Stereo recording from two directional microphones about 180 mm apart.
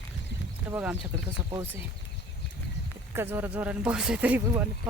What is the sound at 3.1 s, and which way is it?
Speech, 15° right (ahead or behind).